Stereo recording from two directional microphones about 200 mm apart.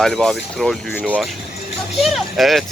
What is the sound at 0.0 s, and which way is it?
Speech, centre (ahead or behind).